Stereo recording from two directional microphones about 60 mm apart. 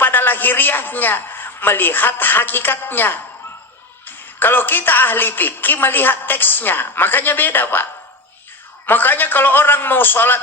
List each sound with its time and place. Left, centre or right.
0.0 s a man's voice: left
8.9 s a woman's voice: left